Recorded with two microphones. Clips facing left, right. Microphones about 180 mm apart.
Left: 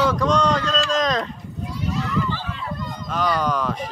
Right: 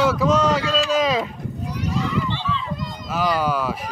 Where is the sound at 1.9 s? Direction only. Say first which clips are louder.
Right 1 dB; centre (ahead or behind).